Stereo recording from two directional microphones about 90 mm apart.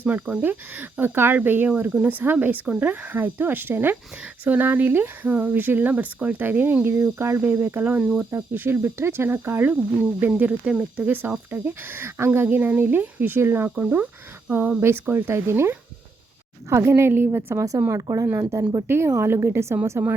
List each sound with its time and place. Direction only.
0.0 s speech: 15° right (ahead or behind)
13.7 s speech: 10° right (ahead or behind)
17.6 s speech: 35° right (ahead or behind)